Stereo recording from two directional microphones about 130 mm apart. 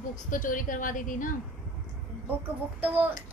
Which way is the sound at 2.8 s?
10° right (ahead or behind).